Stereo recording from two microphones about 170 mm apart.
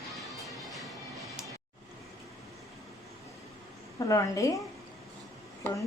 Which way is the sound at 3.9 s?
20° left (ahead or behind).